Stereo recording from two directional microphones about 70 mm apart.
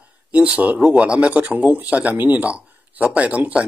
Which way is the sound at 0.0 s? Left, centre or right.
Centre.